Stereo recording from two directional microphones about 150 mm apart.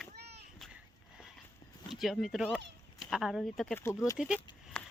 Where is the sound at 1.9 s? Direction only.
Centre (ahead or behind).